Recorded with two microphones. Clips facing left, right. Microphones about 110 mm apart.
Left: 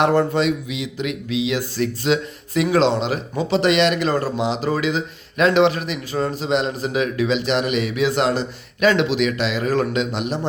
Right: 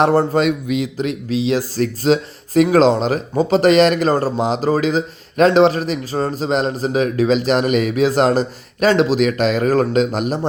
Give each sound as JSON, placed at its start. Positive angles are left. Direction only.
{"t": 0.0, "sound": "speech", "side_deg": -35}